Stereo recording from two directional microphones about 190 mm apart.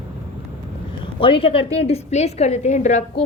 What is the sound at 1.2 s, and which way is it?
A woman's voice, 30° left (ahead or behind).